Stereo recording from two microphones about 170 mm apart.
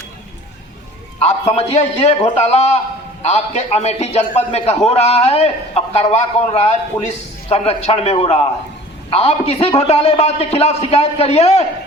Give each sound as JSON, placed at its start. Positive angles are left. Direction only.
{"t": 1.2, "sound": "a man's voice", "side_deg": 40}